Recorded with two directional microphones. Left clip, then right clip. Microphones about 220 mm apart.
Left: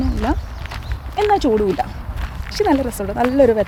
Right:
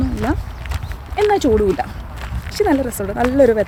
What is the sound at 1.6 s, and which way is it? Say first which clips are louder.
Speech: right 1 dB; centre (ahead or behind).